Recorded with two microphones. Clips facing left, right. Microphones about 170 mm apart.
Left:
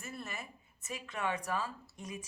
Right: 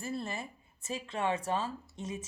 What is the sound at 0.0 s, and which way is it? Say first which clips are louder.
Speech: right 7 dB; 30° right (ahead or behind).